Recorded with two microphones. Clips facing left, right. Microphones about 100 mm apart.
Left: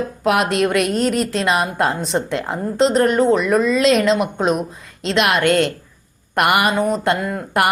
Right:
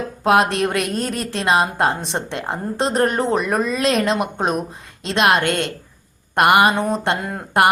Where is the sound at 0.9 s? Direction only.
25° left (ahead or behind).